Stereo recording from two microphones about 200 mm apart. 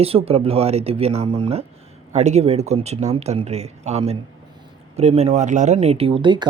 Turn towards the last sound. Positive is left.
turn(degrees=-25)  # may be behind; listen again after turning